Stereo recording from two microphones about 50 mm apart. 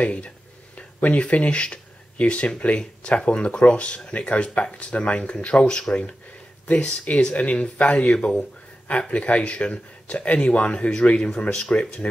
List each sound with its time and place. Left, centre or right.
0.0 s speech: left